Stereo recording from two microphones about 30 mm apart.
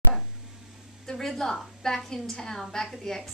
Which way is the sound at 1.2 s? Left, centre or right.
Centre.